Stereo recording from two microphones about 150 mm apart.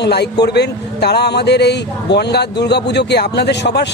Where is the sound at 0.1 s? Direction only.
90° left.